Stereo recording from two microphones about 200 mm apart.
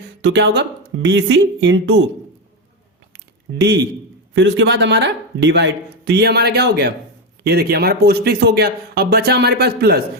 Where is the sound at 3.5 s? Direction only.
60° right (ahead or behind).